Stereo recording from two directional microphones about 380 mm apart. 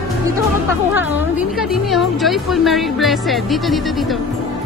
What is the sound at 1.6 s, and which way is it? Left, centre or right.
Speech, centre.